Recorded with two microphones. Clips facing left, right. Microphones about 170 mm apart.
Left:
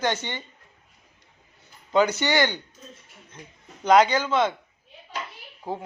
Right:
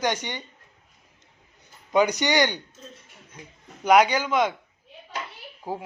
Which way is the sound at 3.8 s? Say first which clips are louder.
Even; 10° right (ahead or behind).